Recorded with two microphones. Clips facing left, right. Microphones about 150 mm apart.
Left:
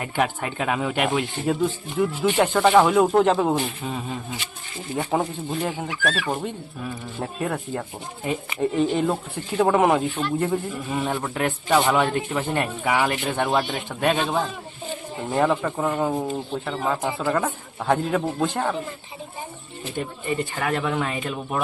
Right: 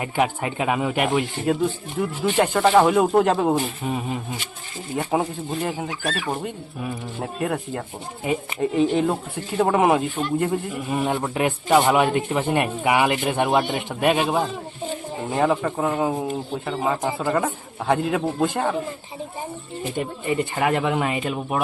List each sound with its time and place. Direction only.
0.0 s a man's voice: 10° right (ahead or behind)
5.1 s a man's voice: 5° right (ahead or behind)
20.0 s a man's voice: 15° right (ahead or behind)